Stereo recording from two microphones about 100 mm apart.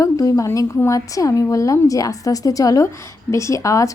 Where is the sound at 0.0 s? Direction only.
35° left (ahead or behind).